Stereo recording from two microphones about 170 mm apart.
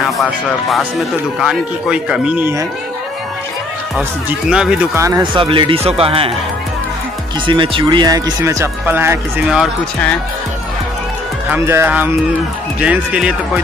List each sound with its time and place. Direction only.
0.0 s speech: centre (ahead or behind)
4.3 s speech: 5° right (ahead or behind)
4.9 s speech: 20° right (ahead or behind)
5.2 s speech: 30° right (ahead or behind)
7.4 s speech: 30° right (ahead or behind); by 9.6 s 15° right (ahead or behind)
11.5 s speech: 15° right (ahead or behind)